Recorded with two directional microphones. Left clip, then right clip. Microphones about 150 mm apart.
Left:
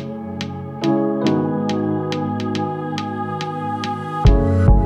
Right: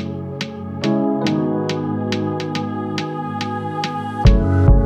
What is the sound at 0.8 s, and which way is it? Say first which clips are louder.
Music: left 1 dB; 50° right (ahead or behind).